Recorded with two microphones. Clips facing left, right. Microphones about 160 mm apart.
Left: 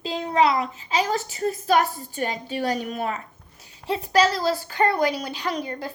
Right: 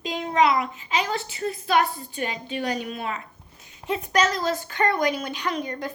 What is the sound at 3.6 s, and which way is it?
A child's voice, 35° left (ahead or behind).